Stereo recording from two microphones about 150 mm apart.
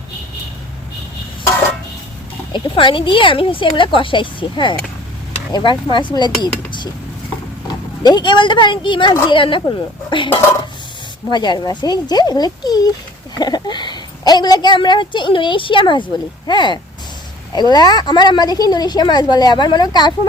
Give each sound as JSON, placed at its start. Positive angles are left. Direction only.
{"t": 2.5, "sound": "a woman's voice", "side_deg": 35}
{"t": 7.7, "sound": "a woman's voice", "side_deg": 30}